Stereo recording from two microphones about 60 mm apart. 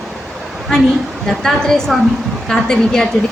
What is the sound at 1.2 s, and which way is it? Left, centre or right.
A woman's voice, centre.